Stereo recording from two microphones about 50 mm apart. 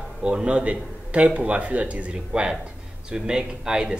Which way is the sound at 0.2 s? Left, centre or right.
Right.